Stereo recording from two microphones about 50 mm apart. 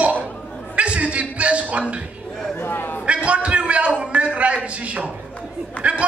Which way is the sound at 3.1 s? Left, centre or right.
Right.